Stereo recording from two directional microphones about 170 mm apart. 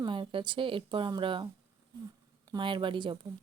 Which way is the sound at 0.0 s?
30° right (ahead or behind).